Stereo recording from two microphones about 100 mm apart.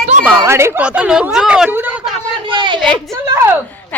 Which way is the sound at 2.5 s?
50° right (ahead or behind).